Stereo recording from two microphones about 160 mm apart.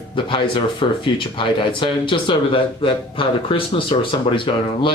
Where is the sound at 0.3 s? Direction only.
30° left (ahead or behind).